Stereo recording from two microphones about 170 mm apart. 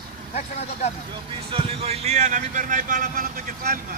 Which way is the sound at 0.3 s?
40° left (ahead or behind).